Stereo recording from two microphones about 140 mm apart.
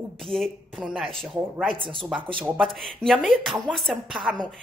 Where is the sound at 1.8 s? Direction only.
35° right (ahead or behind).